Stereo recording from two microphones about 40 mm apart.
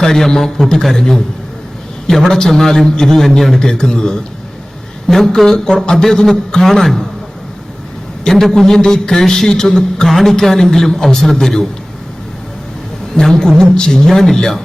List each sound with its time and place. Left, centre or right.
0.0 s a man's voice: centre
5.0 s a man's voice: centre
8.2 s a man's voice: centre
10.1 s a man's voice: centre
13.1 s a man's voice: centre